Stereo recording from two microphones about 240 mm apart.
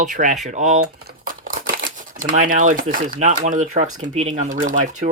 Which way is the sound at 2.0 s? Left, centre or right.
Right.